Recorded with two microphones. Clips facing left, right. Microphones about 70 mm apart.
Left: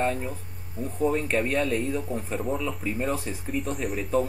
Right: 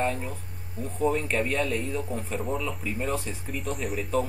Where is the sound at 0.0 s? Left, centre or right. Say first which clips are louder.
Left 1 dB; centre.